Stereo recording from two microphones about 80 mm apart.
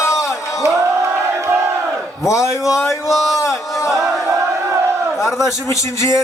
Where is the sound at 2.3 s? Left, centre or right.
Left.